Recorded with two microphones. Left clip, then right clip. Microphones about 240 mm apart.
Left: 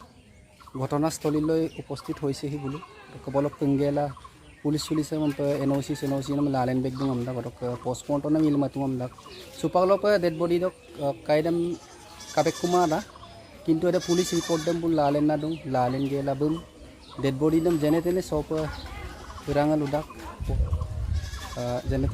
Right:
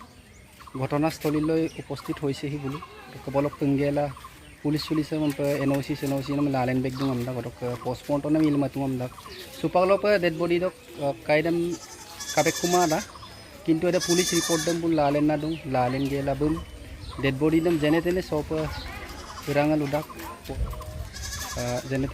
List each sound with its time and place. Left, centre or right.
0.8 s speech: centre
14.0 s speech: right
14.7 s speech: centre
21.6 s speech: centre